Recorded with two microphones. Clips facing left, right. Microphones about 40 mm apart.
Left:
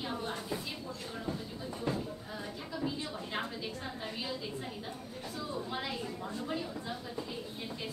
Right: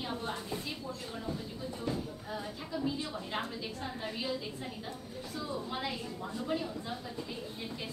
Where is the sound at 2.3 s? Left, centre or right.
Centre.